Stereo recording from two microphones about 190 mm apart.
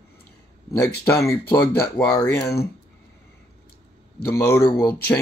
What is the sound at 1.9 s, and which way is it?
Speech, 10° left (ahead or behind).